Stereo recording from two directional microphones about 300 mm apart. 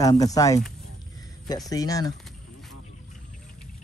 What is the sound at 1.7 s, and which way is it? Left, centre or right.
Speech, centre.